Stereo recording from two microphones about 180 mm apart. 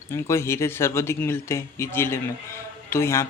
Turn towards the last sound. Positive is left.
turn(degrees=15)  # may be behind; listen again after turning